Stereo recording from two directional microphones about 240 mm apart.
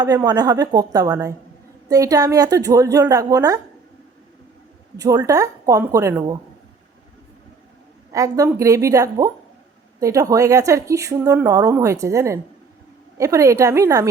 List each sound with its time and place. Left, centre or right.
0.0 s a woman's voice: centre
4.9 s a woman's voice: centre
8.1 s a woman's voice: centre